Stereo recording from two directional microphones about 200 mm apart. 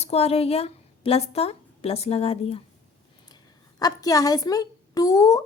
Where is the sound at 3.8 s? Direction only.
20° left (ahead or behind).